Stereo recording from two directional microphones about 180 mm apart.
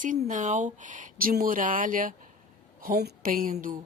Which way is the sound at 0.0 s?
45° right (ahead or behind).